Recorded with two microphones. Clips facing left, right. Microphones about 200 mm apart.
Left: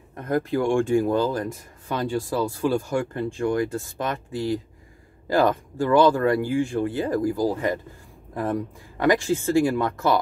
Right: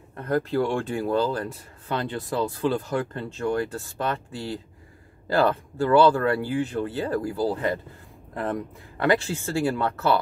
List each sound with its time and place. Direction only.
0.1 s speech: 15° left (ahead or behind)
9.0 s speech: 15° left (ahead or behind)